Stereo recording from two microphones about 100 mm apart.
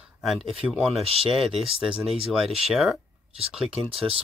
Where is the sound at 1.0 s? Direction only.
75° right (ahead or behind).